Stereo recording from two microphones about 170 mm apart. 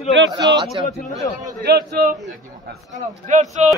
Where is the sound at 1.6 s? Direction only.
60° right (ahead or behind).